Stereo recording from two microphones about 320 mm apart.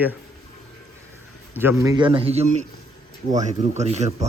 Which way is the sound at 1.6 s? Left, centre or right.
Centre.